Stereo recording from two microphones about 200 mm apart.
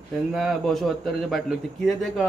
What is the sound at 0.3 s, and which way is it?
A man's voice, centre (ahead or behind).